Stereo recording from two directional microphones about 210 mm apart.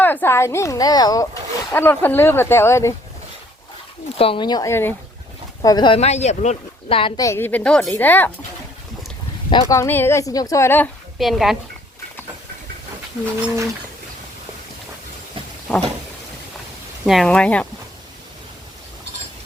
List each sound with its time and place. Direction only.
0.0 s speech: 10° left (ahead or behind)
4.2 s a woman's voice: 25° left (ahead or behind)
9.5 s speech: 20° left (ahead or behind)
11.2 s speech: centre (ahead or behind)
15.7 s speech: 5° left (ahead or behind)
17.1 s speech: centre (ahead or behind)